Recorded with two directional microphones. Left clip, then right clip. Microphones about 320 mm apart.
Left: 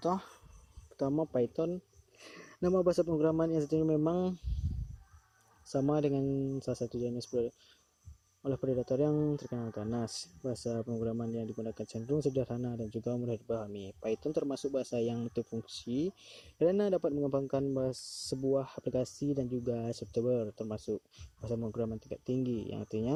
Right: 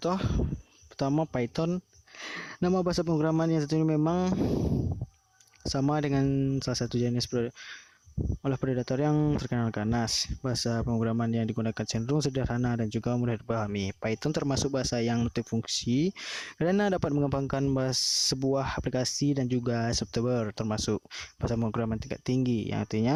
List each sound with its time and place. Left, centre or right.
0.0 s speech: right
5.6 s speech: right
8.4 s speech: right
13.5 s a man's voice: right
14.0 s speech: right
15.9 s a man's voice: right
16.2 s speech: right